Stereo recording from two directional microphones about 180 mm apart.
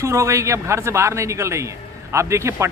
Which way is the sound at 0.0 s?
15° right (ahead or behind).